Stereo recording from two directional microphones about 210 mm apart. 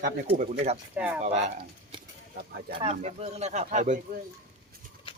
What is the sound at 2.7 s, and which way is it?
Speech, 25° right (ahead or behind).